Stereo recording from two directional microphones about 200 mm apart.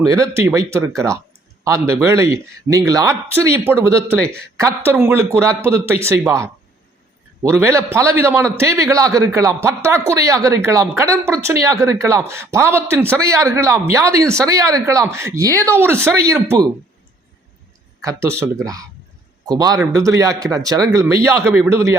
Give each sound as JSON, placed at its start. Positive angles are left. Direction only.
{"t": 0.0, "sound": "speech", "side_deg": -15}
{"t": 18.0, "sound": "speech", "side_deg": -15}